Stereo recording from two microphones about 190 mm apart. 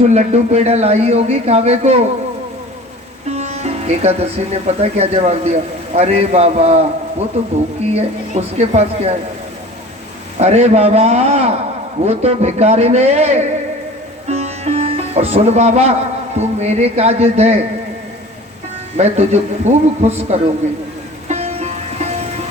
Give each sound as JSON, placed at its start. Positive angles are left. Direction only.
{"t": 0.0, "sound": "speech", "side_deg": -35}
{"t": 3.2, "sound": "speech", "side_deg": -35}
{"t": 7.9, "sound": "speech", "side_deg": -35}
{"t": 10.3, "sound": "speech", "side_deg": -35}
{"t": 14.3, "sound": "sitar", "side_deg": -35}
{"t": 16.4, "sound": "speech", "side_deg": -35}
{"t": 18.9, "sound": "speech", "side_deg": -35}
{"t": 21.2, "sound": "music", "side_deg": -35}